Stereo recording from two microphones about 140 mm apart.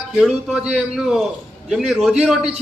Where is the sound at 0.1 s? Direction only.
Centre (ahead or behind).